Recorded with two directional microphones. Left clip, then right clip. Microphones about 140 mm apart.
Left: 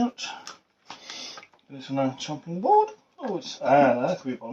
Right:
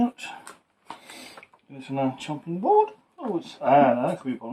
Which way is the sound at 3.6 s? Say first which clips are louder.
Right 1 dB; 20° right (ahead or behind).